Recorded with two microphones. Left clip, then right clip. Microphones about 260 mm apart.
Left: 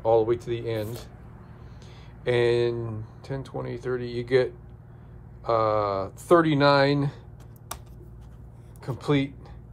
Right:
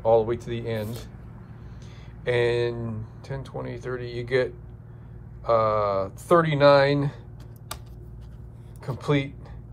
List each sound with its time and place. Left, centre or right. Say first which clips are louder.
0.0 s speech: right 1 dB; centre
2.2 s speech: left 1 dB; centre
8.8 s speech: even; centre